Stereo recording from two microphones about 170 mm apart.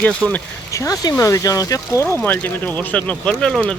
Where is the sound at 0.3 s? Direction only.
15° left (ahead or behind).